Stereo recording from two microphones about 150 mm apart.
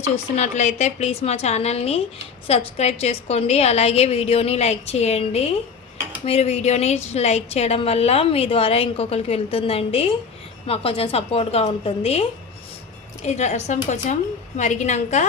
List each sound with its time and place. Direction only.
0.3 s a woman's voice: 50° left (ahead or behind)
13.2 s a woman's voice: 50° left (ahead or behind)